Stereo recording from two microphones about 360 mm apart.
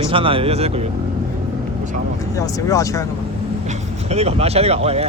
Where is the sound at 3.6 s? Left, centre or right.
Centre.